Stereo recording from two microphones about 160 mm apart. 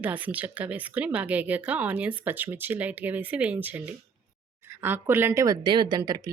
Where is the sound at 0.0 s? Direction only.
10° right (ahead or behind).